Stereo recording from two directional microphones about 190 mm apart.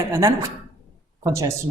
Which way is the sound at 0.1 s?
15° right (ahead or behind).